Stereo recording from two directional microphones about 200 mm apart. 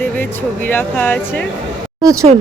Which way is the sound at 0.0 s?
10° left (ahead or behind).